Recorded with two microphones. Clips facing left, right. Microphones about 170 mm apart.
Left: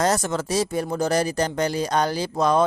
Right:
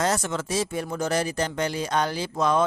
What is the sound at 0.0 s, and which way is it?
Speech, 40° left (ahead or behind).